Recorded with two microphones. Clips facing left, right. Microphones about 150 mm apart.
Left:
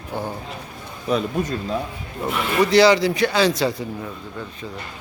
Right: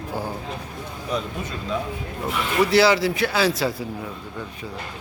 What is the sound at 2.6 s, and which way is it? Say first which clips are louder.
Speech: left 3 dB; 5° right (ahead or behind).